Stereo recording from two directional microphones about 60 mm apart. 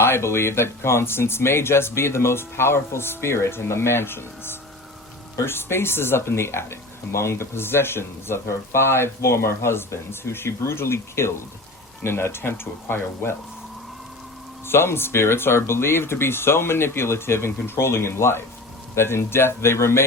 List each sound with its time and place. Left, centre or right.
0.0 s speech: left
14.7 s speech: left